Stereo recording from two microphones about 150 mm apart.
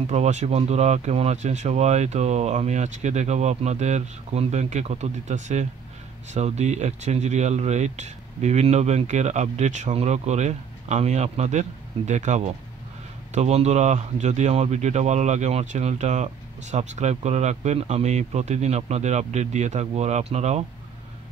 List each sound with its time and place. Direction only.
0.0 s speech: 50° right (ahead or behind)